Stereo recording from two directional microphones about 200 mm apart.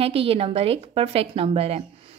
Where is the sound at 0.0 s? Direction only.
30° right (ahead or behind).